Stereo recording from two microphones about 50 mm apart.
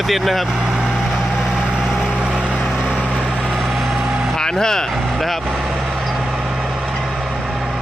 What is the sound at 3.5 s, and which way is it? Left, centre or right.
Vehicle, centre.